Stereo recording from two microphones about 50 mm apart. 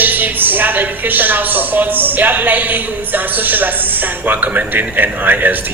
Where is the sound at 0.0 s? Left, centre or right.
Right.